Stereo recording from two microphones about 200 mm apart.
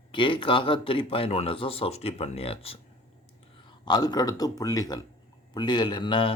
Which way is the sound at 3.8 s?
20° left (ahead or behind).